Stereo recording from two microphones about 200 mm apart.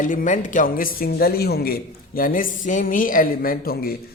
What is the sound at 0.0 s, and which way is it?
A man's voice, 40° left (ahead or behind).